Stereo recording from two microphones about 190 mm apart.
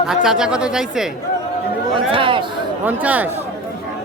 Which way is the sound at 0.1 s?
5° right (ahead or behind).